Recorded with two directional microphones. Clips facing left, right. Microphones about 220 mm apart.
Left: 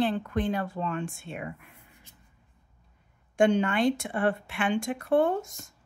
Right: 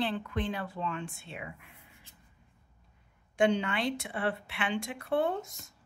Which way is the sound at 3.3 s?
50° left (ahead or behind).